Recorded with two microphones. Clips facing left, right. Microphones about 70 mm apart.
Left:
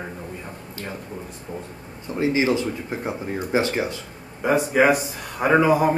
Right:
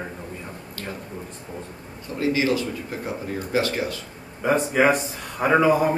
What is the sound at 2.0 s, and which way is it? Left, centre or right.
Speech, left.